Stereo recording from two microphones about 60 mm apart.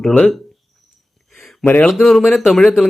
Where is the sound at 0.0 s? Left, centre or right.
Centre.